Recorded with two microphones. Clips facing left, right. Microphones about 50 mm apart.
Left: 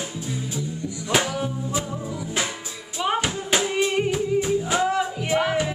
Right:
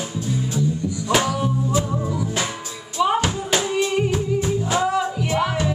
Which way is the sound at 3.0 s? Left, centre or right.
Centre.